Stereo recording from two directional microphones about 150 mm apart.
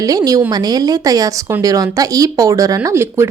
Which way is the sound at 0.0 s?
25° right (ahead or behind).